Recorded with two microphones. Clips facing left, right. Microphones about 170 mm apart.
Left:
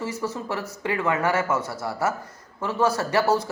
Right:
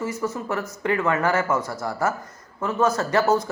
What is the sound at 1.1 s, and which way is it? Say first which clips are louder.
Speech: left 1 dB; 25° left (ahead or behind).